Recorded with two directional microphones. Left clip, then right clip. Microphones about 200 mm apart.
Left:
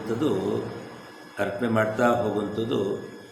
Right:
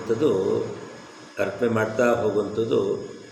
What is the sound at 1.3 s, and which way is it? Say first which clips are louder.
A man's voice: right 2 dB; 15° left (ahead or behind).